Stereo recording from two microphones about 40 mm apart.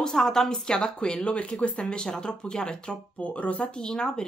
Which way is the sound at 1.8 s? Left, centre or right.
Left.